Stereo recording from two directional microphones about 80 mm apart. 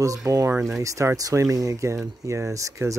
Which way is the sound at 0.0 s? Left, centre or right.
Right.